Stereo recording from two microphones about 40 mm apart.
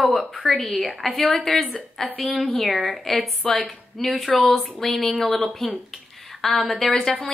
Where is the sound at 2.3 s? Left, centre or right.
Centre.